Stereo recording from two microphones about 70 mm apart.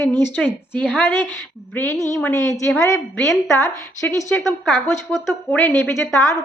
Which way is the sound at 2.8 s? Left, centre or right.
Left.